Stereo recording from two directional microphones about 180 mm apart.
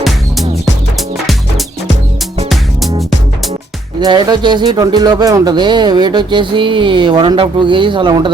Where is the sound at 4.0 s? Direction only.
25° right (ahead or behind).